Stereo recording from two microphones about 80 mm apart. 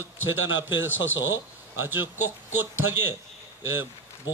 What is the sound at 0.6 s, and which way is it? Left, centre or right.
A man's voice, right.